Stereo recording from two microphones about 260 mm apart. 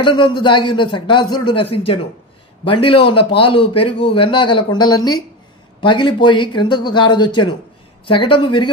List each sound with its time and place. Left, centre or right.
0.0 s a man's voice: centre